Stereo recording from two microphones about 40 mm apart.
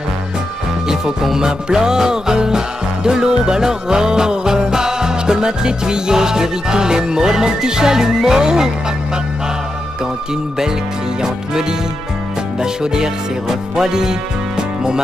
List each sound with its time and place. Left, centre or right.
0.8 s music: centre
12.5 s music: centre